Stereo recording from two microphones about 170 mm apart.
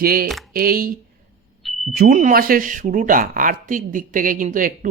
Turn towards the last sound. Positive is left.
turn(degrees=-50)  # may be behind; listen again after turning